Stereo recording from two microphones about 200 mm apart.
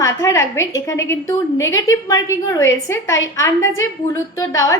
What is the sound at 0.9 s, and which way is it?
A woman's voice, 15° left (ahead or behind).